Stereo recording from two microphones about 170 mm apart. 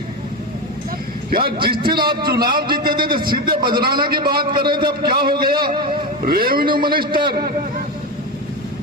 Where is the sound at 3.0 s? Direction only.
30° right (ahead or behind).